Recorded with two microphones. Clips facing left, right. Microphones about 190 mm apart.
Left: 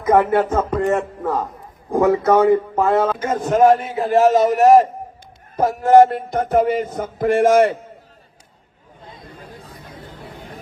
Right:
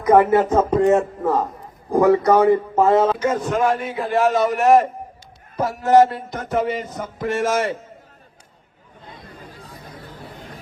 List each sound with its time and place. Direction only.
0.1 s a sound: 10° right (ahead or behind)
1.9 s speech: centre (ahead or behind)
3.2 s a man's voice: 50° left (ahead or behind)
5.5 s speech: 50° left (ahead or behind)